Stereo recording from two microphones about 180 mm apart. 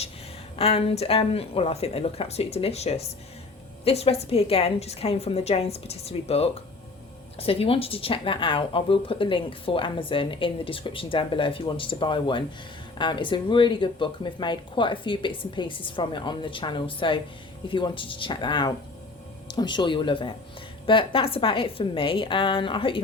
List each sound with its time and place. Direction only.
0.5 s a woman's voice: 35° left (ahead or behind)